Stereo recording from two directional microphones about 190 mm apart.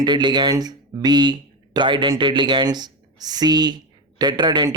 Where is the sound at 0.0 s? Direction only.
25° right (ahead or behind).